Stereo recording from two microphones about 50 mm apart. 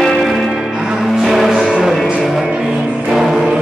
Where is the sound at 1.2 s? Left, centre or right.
Centre.